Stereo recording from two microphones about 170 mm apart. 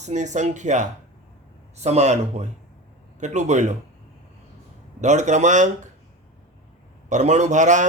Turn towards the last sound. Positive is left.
turn(degrees=-45)  # may be behind; listen again after turning